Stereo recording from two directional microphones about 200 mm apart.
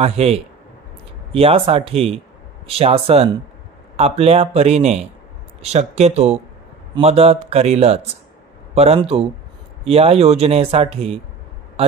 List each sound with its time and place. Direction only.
0.0 s speech: 30° right (ahead or behind)